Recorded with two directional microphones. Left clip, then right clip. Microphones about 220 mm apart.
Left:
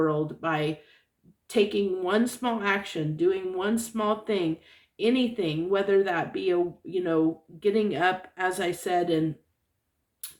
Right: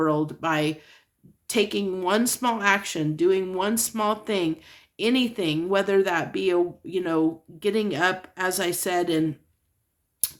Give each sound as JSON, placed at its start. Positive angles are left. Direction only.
{"t": 0.0, "sound": "a woman's voice", "side_deg": -45}